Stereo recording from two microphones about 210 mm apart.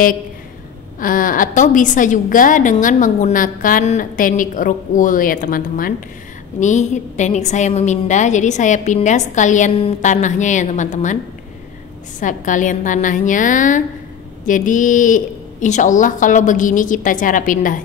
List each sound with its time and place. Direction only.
0.9 s a woman's voice: 40° left (ahead or behind)
12.2 s a woman's voice: 35° left (ahead or behind)